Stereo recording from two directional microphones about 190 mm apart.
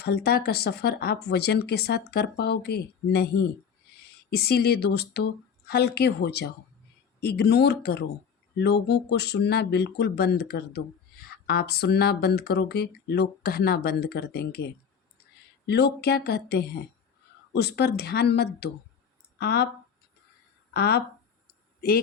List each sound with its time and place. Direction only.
0.0 s speech: 55° left (ahead or behind)
20.7 s speech: 55° left (ahead or behind)